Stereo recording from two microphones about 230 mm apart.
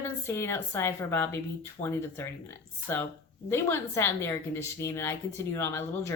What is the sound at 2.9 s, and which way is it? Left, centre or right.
A woman's voice, centre.